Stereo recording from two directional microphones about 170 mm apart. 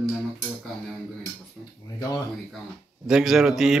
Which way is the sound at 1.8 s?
20° left (ahead or behind).